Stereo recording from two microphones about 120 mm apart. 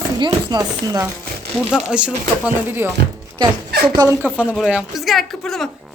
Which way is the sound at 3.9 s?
35° right (ahead or behind).